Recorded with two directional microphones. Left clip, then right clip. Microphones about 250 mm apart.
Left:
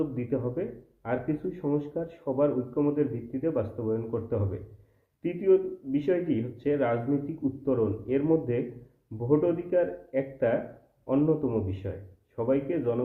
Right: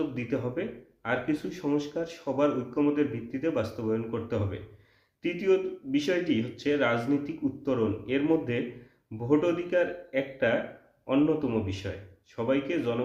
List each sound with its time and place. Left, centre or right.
0.2 s speech: centre